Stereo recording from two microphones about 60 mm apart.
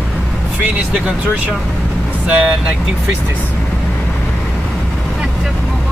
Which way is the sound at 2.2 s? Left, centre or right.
Right.